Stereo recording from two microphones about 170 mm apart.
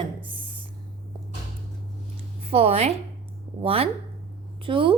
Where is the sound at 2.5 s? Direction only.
35° right (ahead or behind).